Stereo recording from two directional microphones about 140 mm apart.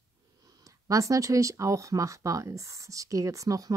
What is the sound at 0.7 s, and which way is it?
Speech, 25° right (ahead or behind).